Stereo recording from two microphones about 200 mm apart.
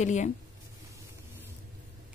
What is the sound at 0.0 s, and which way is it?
Speech, 35° left (ahead or behind).